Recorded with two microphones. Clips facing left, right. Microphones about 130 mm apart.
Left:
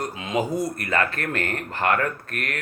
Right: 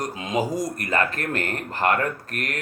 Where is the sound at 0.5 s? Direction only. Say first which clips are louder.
Even; 35° right (ahead or behind).